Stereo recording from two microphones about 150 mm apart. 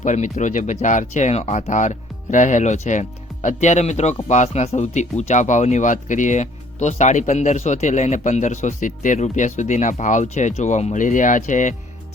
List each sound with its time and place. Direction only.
0.0 s speech: 55° left (ahead or behind)